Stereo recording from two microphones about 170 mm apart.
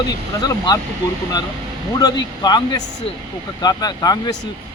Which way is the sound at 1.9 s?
25° left (ahead or behind).